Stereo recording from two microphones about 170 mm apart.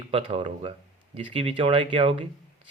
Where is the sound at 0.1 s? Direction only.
35° right (ahead or behind).